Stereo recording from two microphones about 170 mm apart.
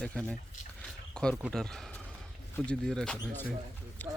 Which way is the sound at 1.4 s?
5° right (ahead or behind).